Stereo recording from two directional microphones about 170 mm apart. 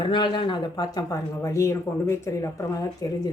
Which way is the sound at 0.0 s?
30° left (ahead or behind).